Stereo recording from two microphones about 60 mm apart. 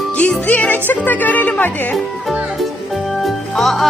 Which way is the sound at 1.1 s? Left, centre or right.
Left.